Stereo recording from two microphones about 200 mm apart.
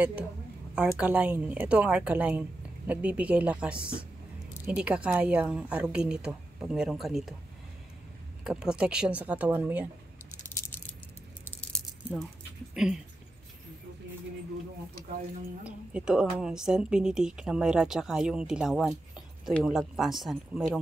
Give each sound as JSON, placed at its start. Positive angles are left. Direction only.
{"t": 0.7, "sound": "a woman's voice", "side_deg": -5}
{"t": 8.5, "sound": "a woman's voice", "side_deg": -5}
{"t": 12.7, "sound": "speech", "side_deg": -5}
{"t": 15.6, "sound": "a woman's voice", "side_deg": -5}